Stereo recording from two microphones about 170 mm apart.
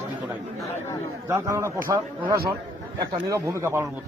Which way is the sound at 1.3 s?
15° right (ahead or behind).